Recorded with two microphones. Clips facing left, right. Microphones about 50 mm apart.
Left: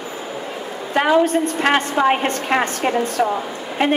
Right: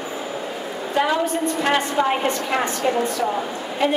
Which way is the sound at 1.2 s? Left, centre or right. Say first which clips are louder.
Left 4 dB; left.